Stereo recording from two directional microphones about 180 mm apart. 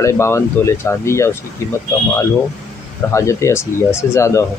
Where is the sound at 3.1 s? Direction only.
15° left (ahead or behind).